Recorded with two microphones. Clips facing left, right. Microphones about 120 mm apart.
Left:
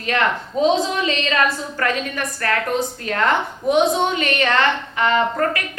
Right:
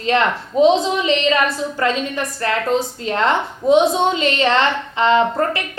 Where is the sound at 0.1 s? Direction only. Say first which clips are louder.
Right 3 dB; 30° right (ahead or behind).